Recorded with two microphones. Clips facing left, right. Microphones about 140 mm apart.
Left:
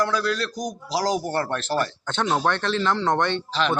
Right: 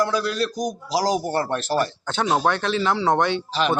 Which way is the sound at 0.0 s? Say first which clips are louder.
Right 1 dB; 10° right (ahead or behind).